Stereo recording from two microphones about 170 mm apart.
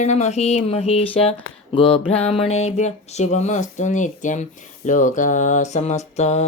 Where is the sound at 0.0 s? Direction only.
40° left (ahead or behind).